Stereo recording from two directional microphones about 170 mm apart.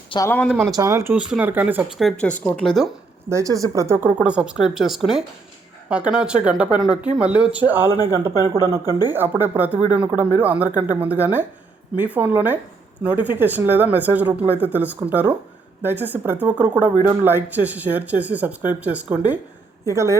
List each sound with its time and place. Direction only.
0.3 s speech: 10° left (ahead or behind)
0.7 s speech: 20° right (ahead or behind); by 2.9 s centre (ahead or behind)
3.2 s speech: 20° right (ahead or behind)
8.4 s speech: 20° left (ahead or behind)
9.0 s speech: 10° right (ahead or behind)